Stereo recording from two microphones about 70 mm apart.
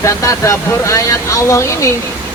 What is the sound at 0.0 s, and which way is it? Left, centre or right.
Speech, left.